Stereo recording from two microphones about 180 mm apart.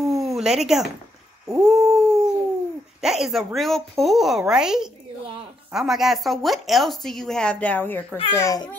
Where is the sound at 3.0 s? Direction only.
Centre (ahead or behind); by 8.7 s 20° left (ahead or behind).